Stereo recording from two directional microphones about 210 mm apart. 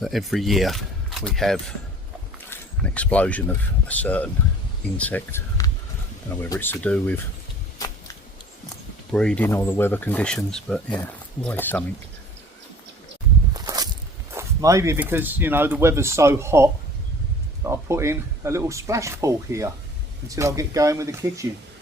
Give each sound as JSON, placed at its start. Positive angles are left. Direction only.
{"t": 0.0, "sound": "speech", "side_deg": 0}
{"t": 9.1, "sound": "speech", "side_deg": 5}
{"t": 13.5, "sound": "walk", "side_deg": -20}
{"t": 14.3, "sound": "speech", "side_deg": -15}